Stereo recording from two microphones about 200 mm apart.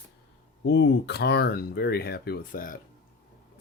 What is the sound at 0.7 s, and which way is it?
Speech, 60° left (ahead or behind).